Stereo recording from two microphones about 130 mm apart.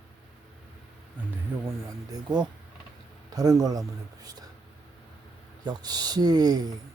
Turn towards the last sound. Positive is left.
turn(degrees=-30)  # may be behind; listen again after turning